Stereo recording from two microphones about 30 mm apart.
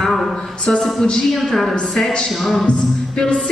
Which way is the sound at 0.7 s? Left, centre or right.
Centre.